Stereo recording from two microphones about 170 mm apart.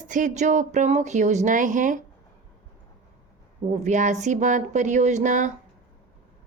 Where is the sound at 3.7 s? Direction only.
45° right (ahead or behind).